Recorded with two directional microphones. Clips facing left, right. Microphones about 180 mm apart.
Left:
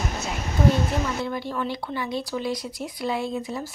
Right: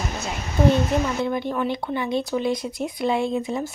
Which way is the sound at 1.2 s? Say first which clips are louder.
Right 4 dB; 20° right (ahead or behind).